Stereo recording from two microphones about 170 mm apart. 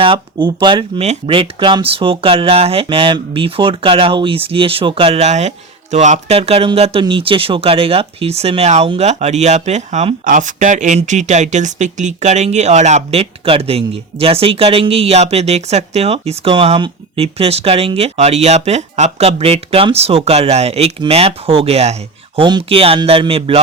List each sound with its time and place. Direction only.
0.0 s speech: 30° right (ahead or behind)